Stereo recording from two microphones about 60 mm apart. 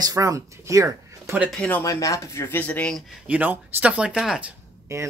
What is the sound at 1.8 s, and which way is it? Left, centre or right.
Speech, left.